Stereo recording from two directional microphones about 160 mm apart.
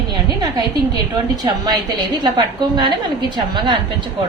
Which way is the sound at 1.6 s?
25° right (ahead or behind).